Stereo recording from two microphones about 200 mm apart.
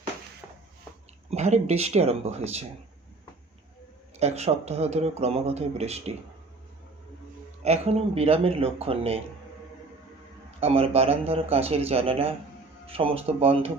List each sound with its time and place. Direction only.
0.4 s a sound: 5° right (ahead or behind)
1.3 s speech: 35° right (ahead or behind)
4.2 s speech: 35° right (ahead or behind)
7.6 s speech: 30° right (ahead or behind)
10.6 s speech: 30° right (ahead or behind)